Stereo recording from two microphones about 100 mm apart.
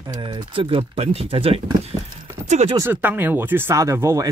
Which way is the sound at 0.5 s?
70° right (ahead or behind).